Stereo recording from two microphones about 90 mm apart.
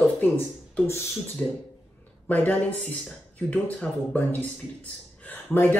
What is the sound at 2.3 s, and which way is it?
A man's voice, 20° left (ahead or behind).